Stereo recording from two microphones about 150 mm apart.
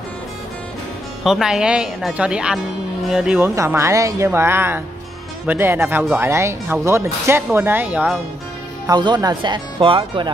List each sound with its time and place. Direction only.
1.2 s speech: 5° right (ahead or behind)
8.8 s speech: 30° right (ahead or behind)